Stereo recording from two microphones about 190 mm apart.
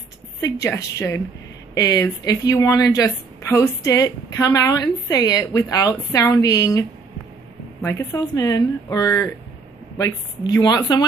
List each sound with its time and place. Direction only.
0.4 s a woman's voice: 15° left (ahead or behind)